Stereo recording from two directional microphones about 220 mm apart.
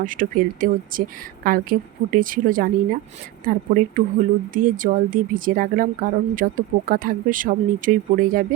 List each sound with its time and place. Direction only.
0.0 s speech: 35° right (ahead or behind)